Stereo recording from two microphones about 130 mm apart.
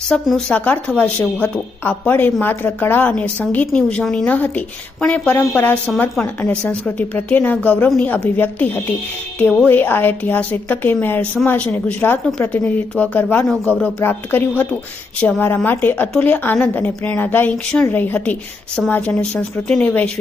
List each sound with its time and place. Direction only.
0.1 s speech: 5° left (ahead or behind)